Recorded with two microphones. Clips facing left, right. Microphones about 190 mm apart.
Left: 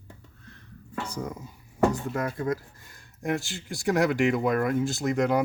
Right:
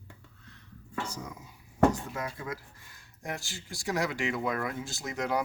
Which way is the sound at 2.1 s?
50° left (ahead or behind).